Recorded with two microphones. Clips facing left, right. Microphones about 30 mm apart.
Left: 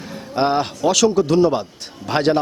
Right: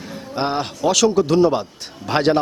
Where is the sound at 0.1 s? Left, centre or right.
Centre.